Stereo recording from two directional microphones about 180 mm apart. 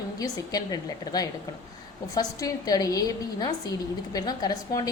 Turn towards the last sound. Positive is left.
turn(degrees=20)  # may be behind; listen again after turning